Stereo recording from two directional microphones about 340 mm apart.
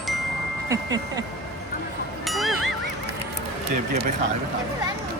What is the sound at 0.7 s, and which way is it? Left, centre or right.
Speech, centre.